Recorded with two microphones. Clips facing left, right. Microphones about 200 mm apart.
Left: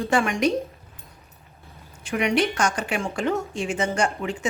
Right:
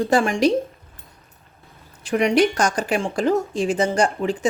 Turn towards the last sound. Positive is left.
turn(degrees=-35)  # may be behind; listen again after turning